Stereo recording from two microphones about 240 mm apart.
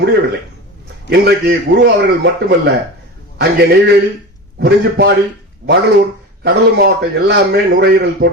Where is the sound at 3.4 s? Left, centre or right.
Right.